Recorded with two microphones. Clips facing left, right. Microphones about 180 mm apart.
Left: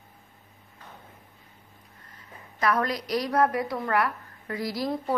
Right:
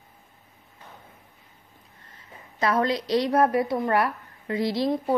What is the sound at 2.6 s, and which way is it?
A woman's voice, 25° right (ahead or behind).